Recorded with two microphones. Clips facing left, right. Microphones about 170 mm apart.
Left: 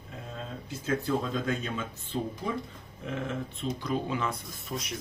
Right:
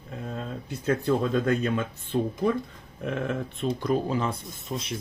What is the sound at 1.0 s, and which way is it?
Speech, 60° right (ahead or behind).